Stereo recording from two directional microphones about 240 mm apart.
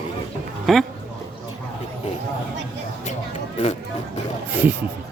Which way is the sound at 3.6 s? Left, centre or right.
Left.